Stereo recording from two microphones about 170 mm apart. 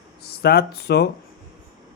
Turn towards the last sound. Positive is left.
turn(degrees=70)  # may be behind; listen again after turning